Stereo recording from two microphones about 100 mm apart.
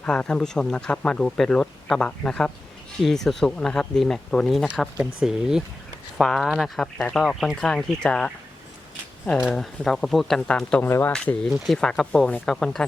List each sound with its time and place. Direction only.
0.0 s speech: 10° left (ahead or behind)
9.6 s speech: 5° left (ahead or behind)
10.8 s speech: 25° left (ahead or behind)
11.5 s speech: centre (ahead or behind)